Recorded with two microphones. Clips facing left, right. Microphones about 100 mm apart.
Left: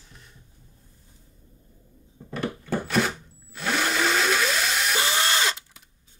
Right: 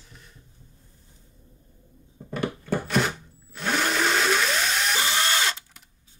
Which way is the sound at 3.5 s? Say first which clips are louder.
Even; centre (ahead or behind).